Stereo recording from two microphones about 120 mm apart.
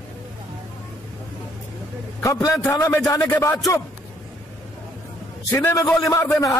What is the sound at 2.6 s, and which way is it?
Speech, 25° left (ahead or behind).